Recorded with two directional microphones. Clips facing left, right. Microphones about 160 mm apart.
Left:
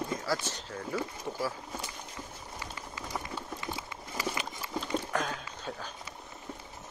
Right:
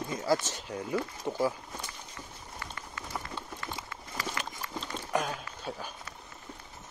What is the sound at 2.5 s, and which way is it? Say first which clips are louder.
Run: even; 15° left (ahead or behind).